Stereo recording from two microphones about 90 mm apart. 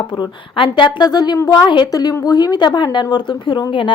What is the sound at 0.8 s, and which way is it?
A woman's voice, 50° left (ahead or behind).